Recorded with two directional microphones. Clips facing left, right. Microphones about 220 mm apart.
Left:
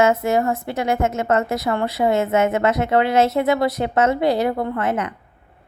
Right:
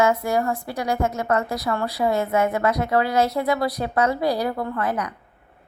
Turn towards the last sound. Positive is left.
turn(degrees=25)  # may be behind; listen again after turning